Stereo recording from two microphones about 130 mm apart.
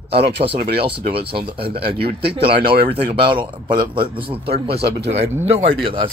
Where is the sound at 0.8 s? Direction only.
45° right (ahead or behind).